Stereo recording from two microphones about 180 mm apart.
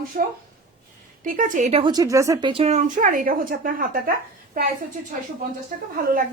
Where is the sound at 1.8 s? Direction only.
20° right (ahead or behind); by 4.1 s 50° right (ahead or behind).